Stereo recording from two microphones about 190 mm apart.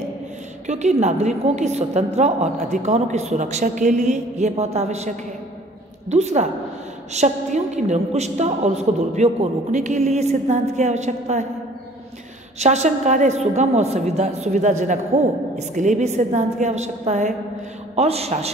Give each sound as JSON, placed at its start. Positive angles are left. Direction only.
{"t": 0.7, "sound": "a woman's voice", "side_deg": -35}
{"t": 12.5, "sound": "a woman's voice", "side_deg": -35}